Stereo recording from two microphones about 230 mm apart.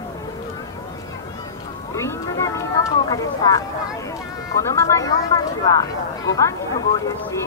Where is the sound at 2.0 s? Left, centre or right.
Centre.